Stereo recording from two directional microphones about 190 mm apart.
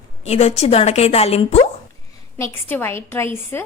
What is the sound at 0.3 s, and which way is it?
A woman's voice, 35° left (ahead or behind).